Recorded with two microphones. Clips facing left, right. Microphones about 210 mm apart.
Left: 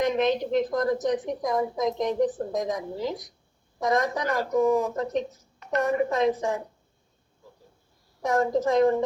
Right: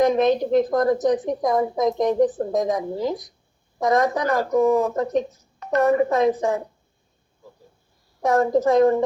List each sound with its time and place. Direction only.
0.1 s a woman's voice: 40° right (ahead or behind)
8.2 s a woman's voice: 55° right (ahead or behind)